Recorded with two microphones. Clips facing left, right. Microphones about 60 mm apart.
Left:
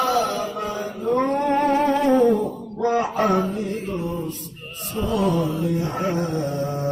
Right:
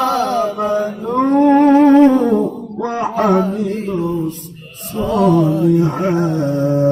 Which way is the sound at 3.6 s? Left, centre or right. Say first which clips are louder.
Right 7 dB; right.